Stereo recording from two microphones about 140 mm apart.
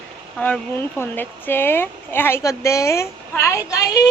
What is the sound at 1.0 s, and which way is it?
A woman's voice, 15° left (ahead or behind).